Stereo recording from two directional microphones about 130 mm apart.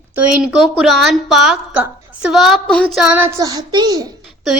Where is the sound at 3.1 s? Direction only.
20° right (ahead or behind).